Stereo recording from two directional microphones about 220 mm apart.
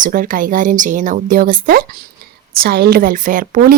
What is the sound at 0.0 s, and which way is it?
A woman's voice, 40° right (ahead or behind).